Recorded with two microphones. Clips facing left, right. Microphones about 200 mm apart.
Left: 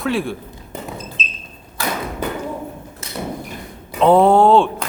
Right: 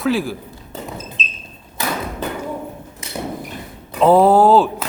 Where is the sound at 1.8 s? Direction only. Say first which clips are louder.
Even; 20° right (ahead or behind).